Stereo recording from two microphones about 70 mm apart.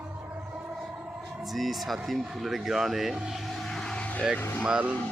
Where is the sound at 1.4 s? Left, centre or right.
Centre.